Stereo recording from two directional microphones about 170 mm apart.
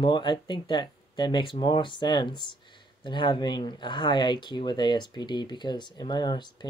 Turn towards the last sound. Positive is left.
turn(degrees=25)  # may be behind; listen again after turning